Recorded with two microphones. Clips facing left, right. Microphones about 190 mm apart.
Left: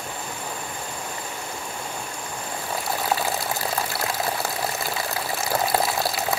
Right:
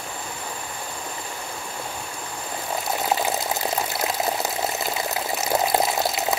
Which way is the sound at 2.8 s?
20° right (ahead or behind).